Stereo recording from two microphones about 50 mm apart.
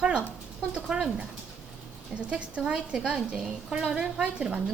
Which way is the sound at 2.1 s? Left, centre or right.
Right.